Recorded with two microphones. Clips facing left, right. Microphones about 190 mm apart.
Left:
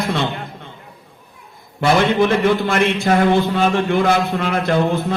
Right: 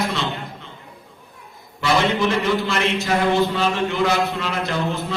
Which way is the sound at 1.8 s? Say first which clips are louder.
Left 4 dB; 55° left (ahead or behind).